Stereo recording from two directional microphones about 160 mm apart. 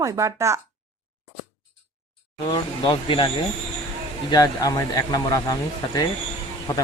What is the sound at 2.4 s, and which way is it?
Speech, 30° left (ahead or behind).